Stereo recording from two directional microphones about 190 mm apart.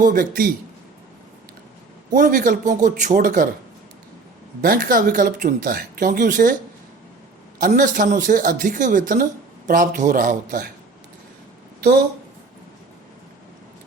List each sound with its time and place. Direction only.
0.0 s speech: 50° right (ahead or behind)
2.0 s speech: 45° right (ahead or behind)
4.6 s speech: 50° right (ahead or behind)
7.6 s speech: 45° right (ahead or behind)